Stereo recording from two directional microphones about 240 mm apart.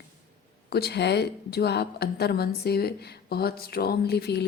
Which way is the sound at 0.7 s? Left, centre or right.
Left.